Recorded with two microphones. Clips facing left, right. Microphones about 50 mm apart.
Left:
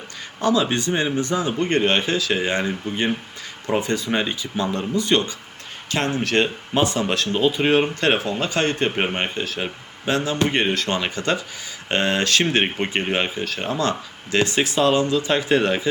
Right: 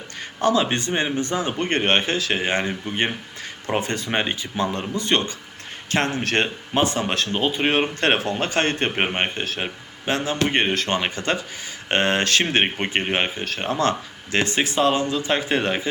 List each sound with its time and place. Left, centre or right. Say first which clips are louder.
0.4 s speech: even; right